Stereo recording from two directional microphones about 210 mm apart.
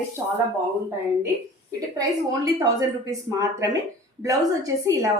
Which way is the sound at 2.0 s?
15° right (ahead or behind).